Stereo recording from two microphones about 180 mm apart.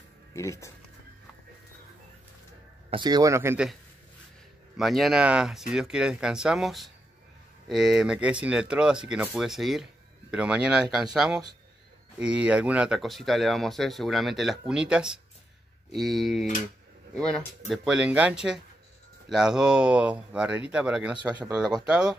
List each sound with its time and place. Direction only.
0.3 s speech: 15° left (ahead or behind)
2.9 s a man's voice: 25° right (ahead or behind)
4.7 s speech: centre (ahead or behind)